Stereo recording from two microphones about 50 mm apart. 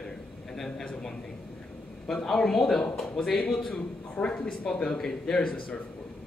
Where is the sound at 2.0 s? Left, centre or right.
Centre.